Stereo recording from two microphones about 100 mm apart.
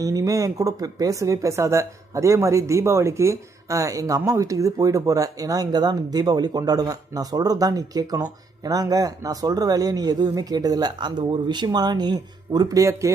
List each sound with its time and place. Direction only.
0.0 s speech: 35° right (ahead or behind)